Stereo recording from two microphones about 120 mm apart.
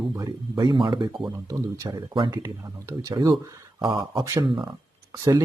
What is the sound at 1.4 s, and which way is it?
Speech, 30° right (ahead or behind).